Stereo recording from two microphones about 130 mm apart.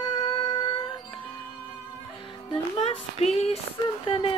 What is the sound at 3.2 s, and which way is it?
Female singing, 55° left (ahead or behind).